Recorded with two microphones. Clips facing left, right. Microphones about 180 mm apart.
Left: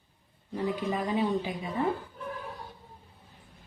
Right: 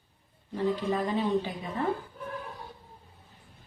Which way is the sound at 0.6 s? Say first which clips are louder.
Right 2 dB; 10° left (ahead or behind).